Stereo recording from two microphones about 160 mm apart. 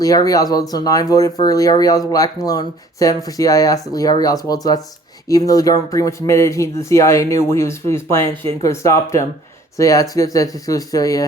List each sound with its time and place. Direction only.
0.0 s speech: 20° left (ahead or behind)